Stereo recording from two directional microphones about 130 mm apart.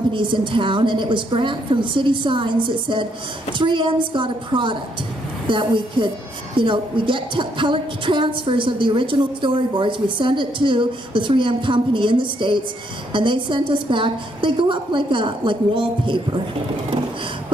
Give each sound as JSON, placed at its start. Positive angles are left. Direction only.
{"t": 0.1, "sound": "a woman's voice", "side_deg": -40}